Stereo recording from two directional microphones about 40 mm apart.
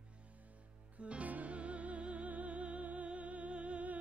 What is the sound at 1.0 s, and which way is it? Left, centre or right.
Music, right.